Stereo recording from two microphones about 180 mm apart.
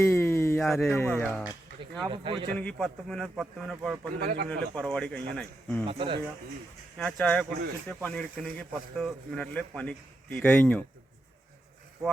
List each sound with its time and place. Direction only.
0.0 s a sound: 15° left (ahead or behind)
0.8 s a man's voice: 5° left (ahead or behind)
2.0 s speech: 30° right (ahead or behind)
2.6 s a man's voice: 5° left (ahead or behind)
4.2 s speech: 60° right (ahead or behind)
4.4 s a man's voice: 5° left (ahead or behind)
5.8 s speech: 30° right (ahead or behind)
6.9 s a man's voice: 5° left (ahead or behind)